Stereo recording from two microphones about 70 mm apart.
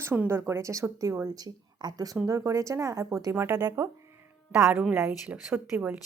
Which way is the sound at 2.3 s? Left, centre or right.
Right.